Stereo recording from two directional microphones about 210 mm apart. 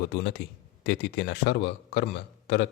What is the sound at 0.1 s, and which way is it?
A man's voice, 55° left (ahead or behind).